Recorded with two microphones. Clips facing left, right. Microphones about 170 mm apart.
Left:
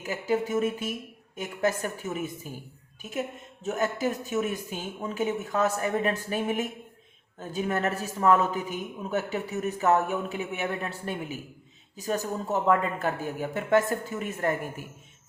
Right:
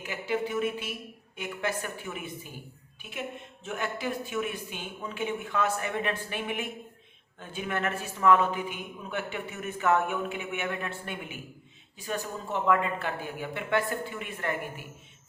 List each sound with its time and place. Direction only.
0.0 s a man's voice: 40° left (ahead or behind)